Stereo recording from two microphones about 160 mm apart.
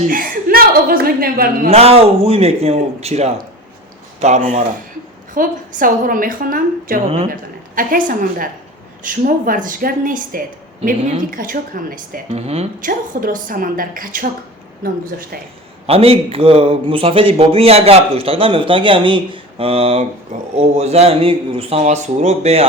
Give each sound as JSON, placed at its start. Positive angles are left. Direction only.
{"t": 0.1, "sound": "a woman's voice", "side_deg": -65}
{"t": 1.7, "sound": "a man's voice", "side_deg": -40}
{"t": 12.3, "sound": "a man's voice", "side_deg": -40}
{"t": 12.8, "sound": "a woman's voice", "side_deg": -60}
{"t": 15.9, "sound": "a man's voice", "side_deg": -35}